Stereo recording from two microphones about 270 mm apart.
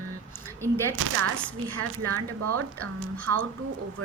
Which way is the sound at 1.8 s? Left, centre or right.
Right.